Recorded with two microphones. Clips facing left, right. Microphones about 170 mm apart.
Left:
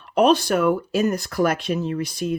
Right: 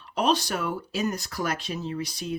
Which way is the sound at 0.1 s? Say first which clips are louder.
Left 8 dB; 55° left (ahead or behind).